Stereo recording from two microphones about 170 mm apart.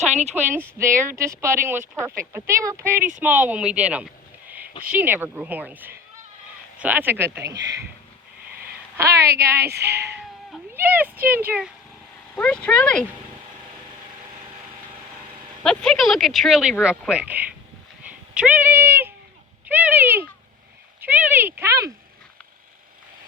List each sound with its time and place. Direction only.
0.1 s a woman's voice: 40° right (ahead or behind)
0.3 s speech: 10° right (ahead or behind)
7.6 s speech: 90° right
9.0 s speech: 15° right (ahead or behind)
9.7 s speech: 75° right (ahead or behind)
10.8 s speech: 10° right (ahead or behind)
12.4 s speech: 5° left (ahead or behind)
15.6 s speech: 5° left (ahead or behind)
18.0 s a sound: 10° right (ahead or behind)
19.6 s speech: 10° right (ahead or behind)